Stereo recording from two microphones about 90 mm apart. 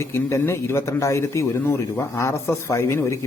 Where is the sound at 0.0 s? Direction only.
30° left (ahead or behind).